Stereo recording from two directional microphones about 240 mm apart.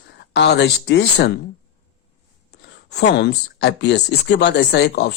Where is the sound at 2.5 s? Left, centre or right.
Left.